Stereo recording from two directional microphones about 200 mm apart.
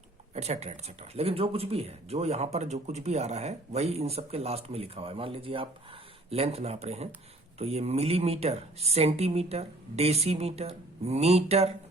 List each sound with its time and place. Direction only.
0.3 s speech: 35° right (ahead or behind)